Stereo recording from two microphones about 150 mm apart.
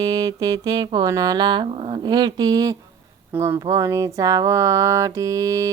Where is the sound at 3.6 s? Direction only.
20° right (ahead or behind).